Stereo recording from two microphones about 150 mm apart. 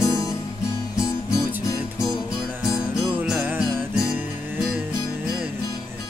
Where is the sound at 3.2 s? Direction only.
5° right (ahead or behind).